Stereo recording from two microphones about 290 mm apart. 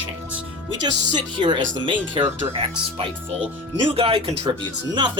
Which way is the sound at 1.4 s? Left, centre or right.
Centre.